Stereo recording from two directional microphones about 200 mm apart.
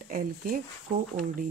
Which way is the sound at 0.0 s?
45° right (ahead or behind).